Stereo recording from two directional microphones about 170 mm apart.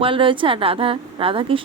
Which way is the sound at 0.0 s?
30° right (ahead or behind).